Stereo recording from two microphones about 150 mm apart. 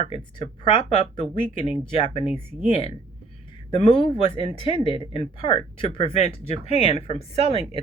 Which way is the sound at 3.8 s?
30° left (ahead or behind).